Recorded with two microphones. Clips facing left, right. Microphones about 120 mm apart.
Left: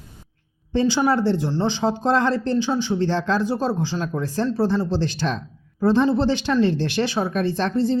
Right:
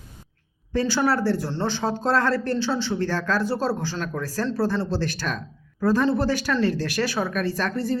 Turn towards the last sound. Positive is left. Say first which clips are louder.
# left 4 dB
turn(degrees=25)  # may be behind; listen again after turning